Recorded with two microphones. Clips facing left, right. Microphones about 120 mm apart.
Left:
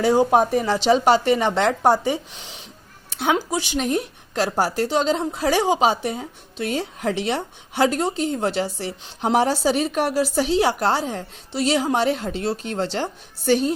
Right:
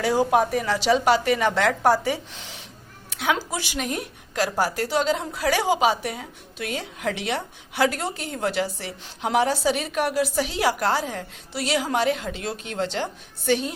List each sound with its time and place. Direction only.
0.0 s a woman's voice: 25° left (ahead or behind)
3.1 s a sound: 30° left (ahead or behind)
3.3 s a woman's voice: 20° left (ahead or behind)
3.8 s a woman's voice: 30° left (ahead or behind)